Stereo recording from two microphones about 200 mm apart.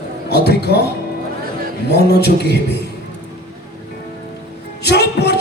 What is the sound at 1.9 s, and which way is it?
Speech, 55° left (ahead or behind).